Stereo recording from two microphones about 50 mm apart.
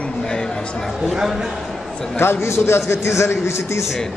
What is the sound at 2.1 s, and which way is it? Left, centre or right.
A man's voice, left.